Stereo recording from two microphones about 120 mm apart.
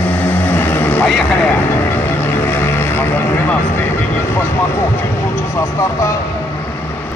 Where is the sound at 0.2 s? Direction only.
15° left (ahead or behind).